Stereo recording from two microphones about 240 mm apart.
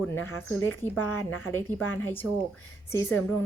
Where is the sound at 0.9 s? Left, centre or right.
Left.